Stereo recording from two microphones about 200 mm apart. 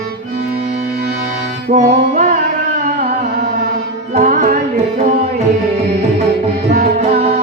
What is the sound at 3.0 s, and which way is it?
Music, 35° right (ahead or behind).